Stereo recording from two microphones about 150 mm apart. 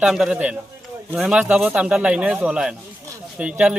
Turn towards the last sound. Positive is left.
turn(degrees=-5)  # may be behind; listen again after turning